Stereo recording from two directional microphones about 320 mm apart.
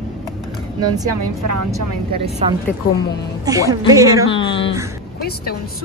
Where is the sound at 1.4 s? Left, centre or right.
Right.